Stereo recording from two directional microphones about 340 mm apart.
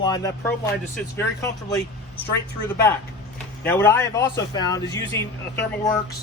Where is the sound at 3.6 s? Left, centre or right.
Centre.